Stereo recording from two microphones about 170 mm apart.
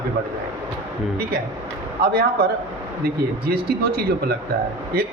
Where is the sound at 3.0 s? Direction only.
65° right (ahead or behind).